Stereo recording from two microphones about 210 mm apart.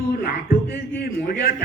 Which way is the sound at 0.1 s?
45° left (ahead or behind).